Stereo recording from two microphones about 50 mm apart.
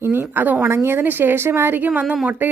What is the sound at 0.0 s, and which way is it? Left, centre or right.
Speech, right.